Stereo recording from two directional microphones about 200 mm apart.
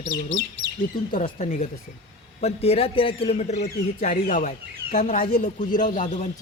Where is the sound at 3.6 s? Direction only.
40° left (ahead or behind).